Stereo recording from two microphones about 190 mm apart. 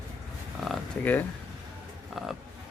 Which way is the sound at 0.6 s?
5° left (ahead or behind).